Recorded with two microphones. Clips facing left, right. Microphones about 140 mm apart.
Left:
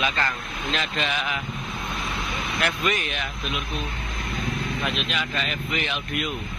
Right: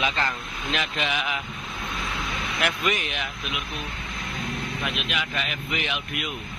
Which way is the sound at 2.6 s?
15° right (ahead or behind).